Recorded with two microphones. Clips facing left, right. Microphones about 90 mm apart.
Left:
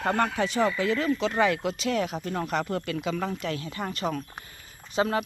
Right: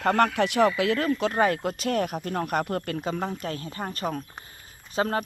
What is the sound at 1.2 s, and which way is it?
Speech, 45° right (ahead or behind).